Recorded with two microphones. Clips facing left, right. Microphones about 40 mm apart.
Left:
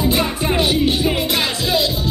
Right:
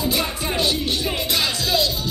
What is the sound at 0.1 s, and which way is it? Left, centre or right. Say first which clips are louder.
Music: left 5 dB; left.